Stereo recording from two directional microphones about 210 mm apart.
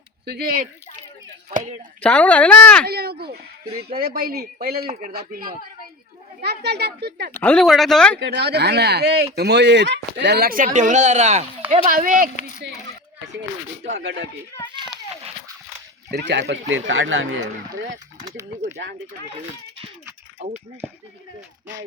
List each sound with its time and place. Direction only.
0.3 s speech: 45° right (ahead or behind)
1.5 s speech: 35° right (ahead or behind)
2.0 s speech: 5° left (ahead or behind)
2.8 s speech: 50° right (ahead or behind)
4.9 s speech: 30° right (ahead or behind)
5.1 s speech: 45° right (ahead or behind)
7.3 s speech: 5° left (ahead or behind)
8.2 s speech: 50° right (ahead or behind)
13.9 s speech: 60° right (ahead or behind)
14.8 s a sound: 20° right (ahead or behind)
16.0 s speech: 50° right (ahead or behind); by 17.4 s 70° right (ahead or behind)
20.4 s speech: 30° right (ahead or behind)